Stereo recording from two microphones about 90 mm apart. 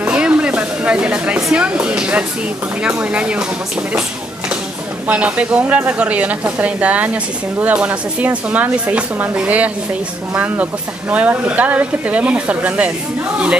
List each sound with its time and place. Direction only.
0.0 s a sound: 15° right (ahead or behind)
2.8 s speech: 15° right (ahead or behind)
5.0 s speech: 15° right (ahead or behind)